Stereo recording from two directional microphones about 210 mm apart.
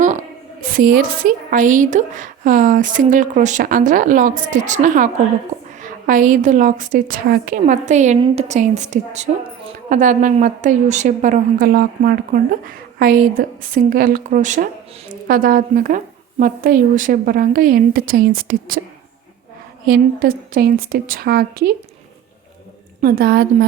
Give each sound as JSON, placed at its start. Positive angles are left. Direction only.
{"t": 0.0, "sound": "a sound", "side_deg": -35}
{"t": 0.9, "sound": "a woman's voice", "side_deg": -45}
{"t": 19.8, "sound": "a woman's voice", "side_deg": -45}
{"t": 23.0, "sound": "a woman's voice", "side_deg": -45}